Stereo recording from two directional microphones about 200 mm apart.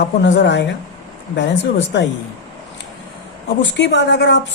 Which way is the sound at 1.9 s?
60° left (ahead or behind).